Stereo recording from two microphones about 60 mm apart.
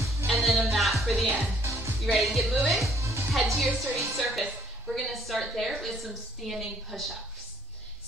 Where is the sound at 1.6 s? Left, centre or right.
Right.